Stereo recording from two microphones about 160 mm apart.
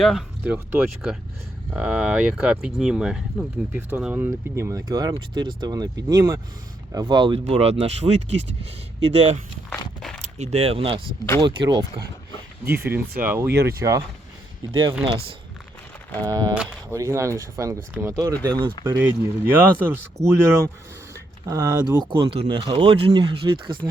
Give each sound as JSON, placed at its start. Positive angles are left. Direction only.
{"t": 0.0, "sound": "speech", "side_deg": 0}
{"t": 9.6, "sound": "walk", "side_deg": 5}
{"t": 10.2, "sound": "speech", "side_deg": -45}
{"t": 12.7, "sound": "speech", "side_deg": -10}
{"t": 15.0, "sound": "speech", "side_deg": -30}